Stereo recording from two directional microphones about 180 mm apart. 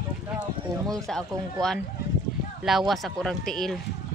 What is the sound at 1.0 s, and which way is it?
Speech, 5° left (ahead or behind).